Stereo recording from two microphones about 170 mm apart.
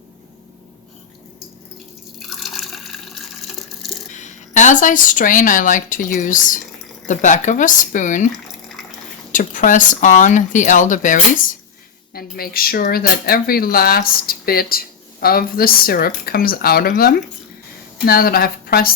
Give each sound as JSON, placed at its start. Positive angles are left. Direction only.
{"t": 2.1, "sound": "water", "side_deg": 0}
{"t": 4.1, "sound": "speech", "side_deg": 45}
{"t": 9.3, "sound": "speech", "side_deg": 50}
{"t": 12.1, "sound": "speech", "side_deg": 60}